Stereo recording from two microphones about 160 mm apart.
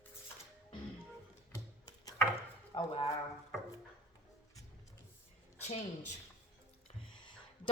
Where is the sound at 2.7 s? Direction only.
35° left (ahead or behind).